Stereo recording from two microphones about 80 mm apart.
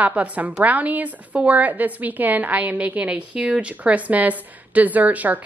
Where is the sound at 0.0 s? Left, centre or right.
Centre.